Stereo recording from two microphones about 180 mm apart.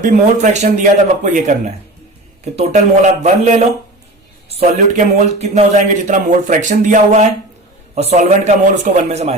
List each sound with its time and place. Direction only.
0.0 s a man's voice: 40° right (ahead or behind)